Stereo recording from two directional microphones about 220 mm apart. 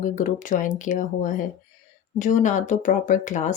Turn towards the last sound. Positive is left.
turn(degrees=35)  # may be behind; listen again after turning